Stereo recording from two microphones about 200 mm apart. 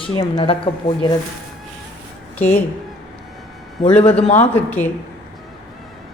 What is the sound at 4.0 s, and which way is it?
Speech, 30° left (ahead or behind).